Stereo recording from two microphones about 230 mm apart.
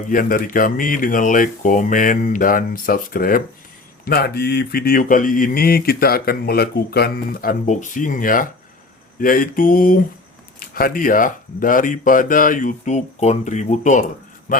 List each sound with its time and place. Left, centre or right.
0.1 s speech: left